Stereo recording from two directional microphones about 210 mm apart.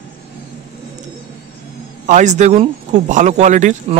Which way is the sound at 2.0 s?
35° right (ahead or behind).